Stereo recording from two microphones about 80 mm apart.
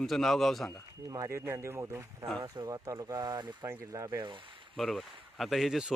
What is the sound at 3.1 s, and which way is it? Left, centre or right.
Speech, right.